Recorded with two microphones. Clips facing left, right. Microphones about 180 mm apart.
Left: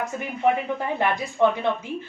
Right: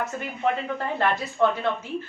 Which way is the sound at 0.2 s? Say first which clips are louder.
Left 6 dB; 15° left (ahead or behind).